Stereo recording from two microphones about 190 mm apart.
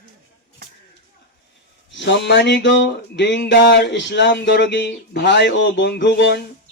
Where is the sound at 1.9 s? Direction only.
65° left (ahead or behind).